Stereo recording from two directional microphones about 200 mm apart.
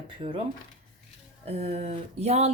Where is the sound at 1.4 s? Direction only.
30° right (ahead or behind).